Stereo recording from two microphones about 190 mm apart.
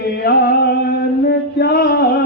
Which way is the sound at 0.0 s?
55° left (ahead or behind).